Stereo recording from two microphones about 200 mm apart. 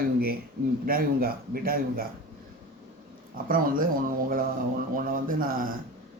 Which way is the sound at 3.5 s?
45° right (ahead or behind).